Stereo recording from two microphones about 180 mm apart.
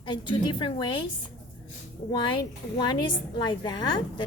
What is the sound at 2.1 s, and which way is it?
A woman's voice, 25° left (ahead or behind).